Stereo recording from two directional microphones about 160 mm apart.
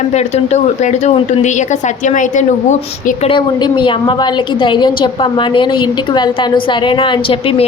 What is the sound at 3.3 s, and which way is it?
A woman's voice, 30° left (ahead or behind).